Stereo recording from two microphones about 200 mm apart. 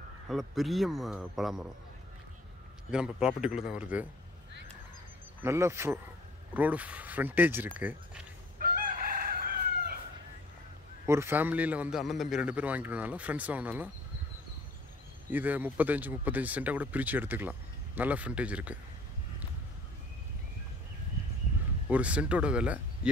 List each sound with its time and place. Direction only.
0.3 s a man's voice: centre (ahead or behind)
2.9 s a man's voice: 5° right (ahead or behind)
5.4 s speech: 15° right (ahead or behind)
8.5 s chicken: 45° right (ahead or behind)
11.1 s speech: 10° right (ahead or behind)
15.3 s speech: 10° right (ahead or behind)
21.8 s a man's voice: 5° right (ahead or behind)